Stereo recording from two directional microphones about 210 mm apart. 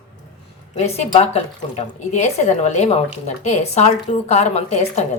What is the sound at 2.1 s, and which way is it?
A woman's voice, 35° left (ahead or behind).